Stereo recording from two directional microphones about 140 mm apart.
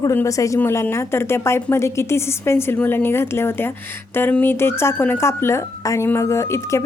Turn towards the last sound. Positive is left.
turn(degrees=20)  # may be behind; listen again after turning